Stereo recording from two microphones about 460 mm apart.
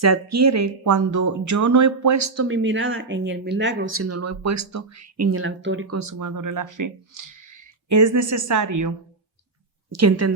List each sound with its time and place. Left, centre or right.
0.0 s speech: right
9.9 s speech: right